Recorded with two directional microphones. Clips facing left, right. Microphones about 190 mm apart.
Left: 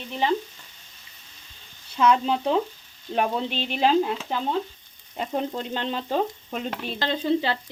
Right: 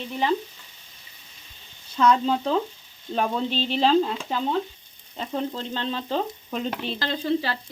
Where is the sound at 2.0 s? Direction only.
10° left (ahead or behind).